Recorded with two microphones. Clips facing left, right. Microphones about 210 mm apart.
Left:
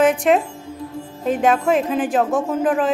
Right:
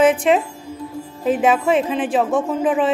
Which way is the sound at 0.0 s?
Centre (ahead or behind).